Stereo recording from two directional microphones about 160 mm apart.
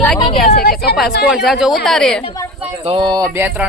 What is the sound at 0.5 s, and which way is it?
Speech, 75° left (ahead or behind).